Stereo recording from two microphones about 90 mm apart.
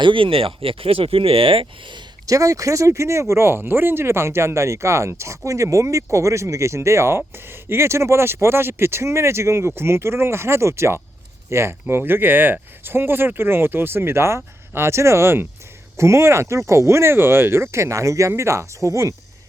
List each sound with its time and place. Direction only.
0.0 s speech: 75° right (ahead or behind)
2.2 s speech: 35° right (ahead or behind)